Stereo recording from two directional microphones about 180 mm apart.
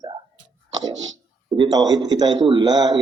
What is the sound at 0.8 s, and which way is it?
Speech, 90° right.